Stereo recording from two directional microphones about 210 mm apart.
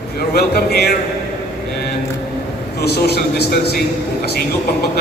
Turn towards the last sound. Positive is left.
turn(degrees=50)  # may be behind; listen again after turning